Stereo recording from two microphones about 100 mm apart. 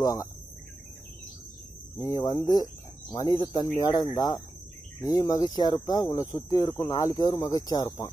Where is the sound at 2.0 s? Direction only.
40° left (ahead or behind).